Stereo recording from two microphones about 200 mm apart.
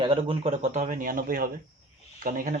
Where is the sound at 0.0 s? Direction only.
25° right (ahead or behind).